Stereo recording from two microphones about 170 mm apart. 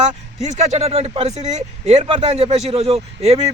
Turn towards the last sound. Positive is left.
turn(degrees=-40)  # may be behind; listen again after turning